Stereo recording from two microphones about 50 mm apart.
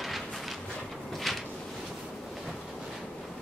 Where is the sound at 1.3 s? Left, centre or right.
Centre.